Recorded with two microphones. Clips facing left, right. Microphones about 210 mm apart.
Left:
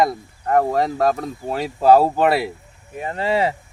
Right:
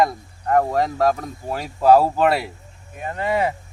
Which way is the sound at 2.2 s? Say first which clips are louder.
Left 1 dB; 5° left (ahead or behind).